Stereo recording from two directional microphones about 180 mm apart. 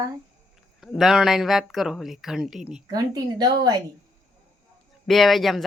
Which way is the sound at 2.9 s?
20° right (ahead or behind).